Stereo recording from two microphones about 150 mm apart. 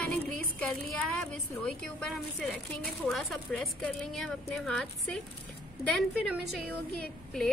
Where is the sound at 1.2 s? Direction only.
5° left (ahead or behind).